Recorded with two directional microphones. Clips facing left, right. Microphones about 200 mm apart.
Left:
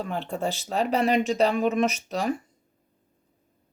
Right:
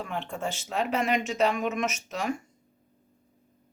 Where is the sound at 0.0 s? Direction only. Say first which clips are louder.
Left 4 dB; 35° left (ahead or behind).